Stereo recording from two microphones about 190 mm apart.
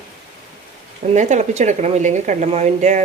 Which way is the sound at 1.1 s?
40° right (ahead or behind).